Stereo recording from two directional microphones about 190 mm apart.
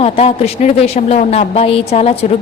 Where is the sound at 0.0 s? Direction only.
30° left (ahead or behind).